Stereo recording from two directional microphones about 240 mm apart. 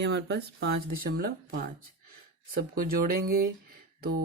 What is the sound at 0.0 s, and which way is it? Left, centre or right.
Speech, right.